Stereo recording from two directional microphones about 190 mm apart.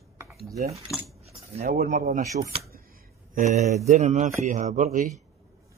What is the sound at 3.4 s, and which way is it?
Speech, 35° right (ahead or behind).